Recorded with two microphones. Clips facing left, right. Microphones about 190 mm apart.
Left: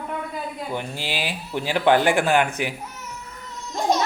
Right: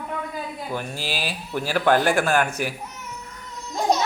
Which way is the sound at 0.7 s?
15° left (ahead or behind).